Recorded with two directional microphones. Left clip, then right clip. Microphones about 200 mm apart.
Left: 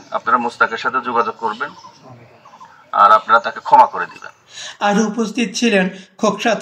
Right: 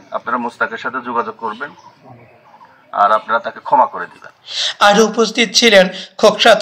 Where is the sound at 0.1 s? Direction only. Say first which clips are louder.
Left 3 dB; 20° left (ahead or behind).